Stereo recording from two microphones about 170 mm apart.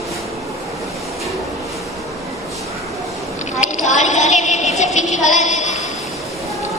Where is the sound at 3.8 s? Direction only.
45° left (ahead or behind).